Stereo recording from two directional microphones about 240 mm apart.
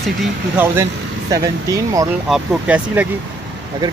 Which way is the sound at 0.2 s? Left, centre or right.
Centre.